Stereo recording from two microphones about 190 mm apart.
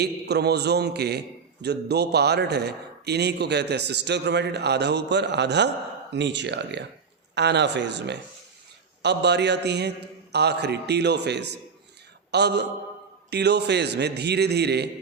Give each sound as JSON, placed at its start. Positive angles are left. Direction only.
{"t": 0.0, "sound": "a man's voice", "side_deg": -60}